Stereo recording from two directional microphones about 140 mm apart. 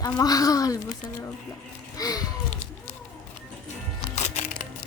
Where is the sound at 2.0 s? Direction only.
25° left (ahead or behind).